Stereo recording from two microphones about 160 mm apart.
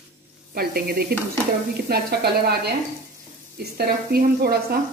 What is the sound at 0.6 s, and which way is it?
A woman's voice, 75° right (ahead or behind).